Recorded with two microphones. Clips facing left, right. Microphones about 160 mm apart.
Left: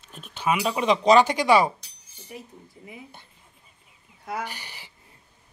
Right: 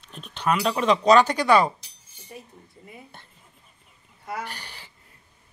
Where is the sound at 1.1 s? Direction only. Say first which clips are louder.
Even; 10° left (ahead or behind).